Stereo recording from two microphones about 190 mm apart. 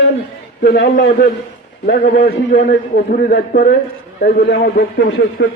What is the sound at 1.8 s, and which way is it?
A man's voice, 50° left (ahead or behind).